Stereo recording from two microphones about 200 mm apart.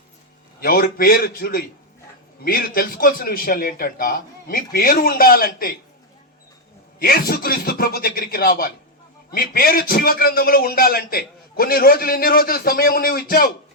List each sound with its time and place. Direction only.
0.6 s a man's voice: 50° left (ahead or behind)
7.0 s a man's voice: 50° left (ahead or behind)